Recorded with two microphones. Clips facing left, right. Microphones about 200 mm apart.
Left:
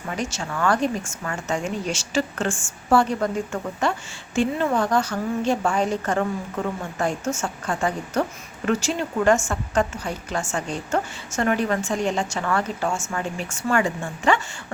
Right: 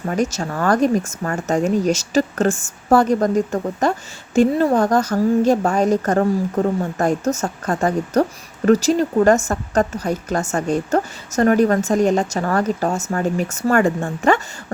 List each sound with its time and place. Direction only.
0.0 s a woman's voice: 40° right (ahead or behind)